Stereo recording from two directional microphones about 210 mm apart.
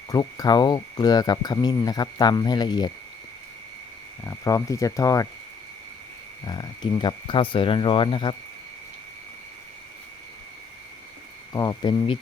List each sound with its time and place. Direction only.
0.1 s speech: 20° left (ahead or behind)
4.2 s speech: 15° left (ahead or behind)
6.4 s speech: 20° left (ahead or behind)
11.5 s speech: 20° left (ahead or behind)